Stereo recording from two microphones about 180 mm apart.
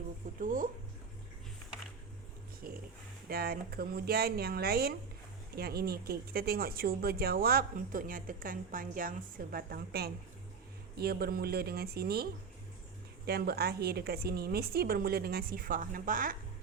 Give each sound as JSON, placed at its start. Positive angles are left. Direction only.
{"t": 0.3, "sound": "speech", "side_deg": -50}
{"t": 2.6, "sound": "a sound", "side_deg": -55}
{"t": 3.2, "sound": "speech", "side_deg": -55}